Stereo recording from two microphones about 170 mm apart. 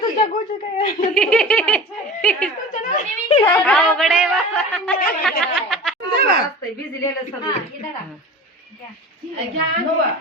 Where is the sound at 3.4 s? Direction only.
10° left (ahead or behind).